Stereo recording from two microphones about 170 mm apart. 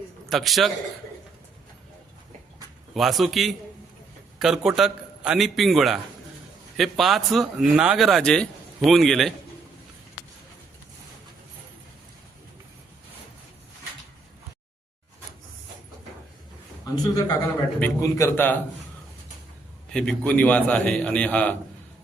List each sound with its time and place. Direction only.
0.3 s speech: centre (ahead or behind)
2.9 s speech: centre (ahead or behind)
16.8 s a man's voice: 20° left (ahead or behind)
19.9 s a man's voice: 5° left (ahead or behind)